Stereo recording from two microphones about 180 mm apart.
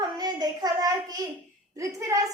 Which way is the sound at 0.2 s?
20° right (ahead or behind).